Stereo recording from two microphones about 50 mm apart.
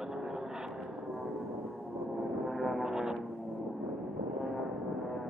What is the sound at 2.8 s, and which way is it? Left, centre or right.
Music, centre.